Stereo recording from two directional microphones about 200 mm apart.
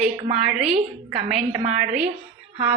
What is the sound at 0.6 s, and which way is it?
A woman's voice, 30° right (ahead or behind).